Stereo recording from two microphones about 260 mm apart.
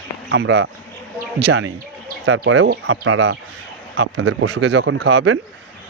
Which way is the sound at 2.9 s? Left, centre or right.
Right.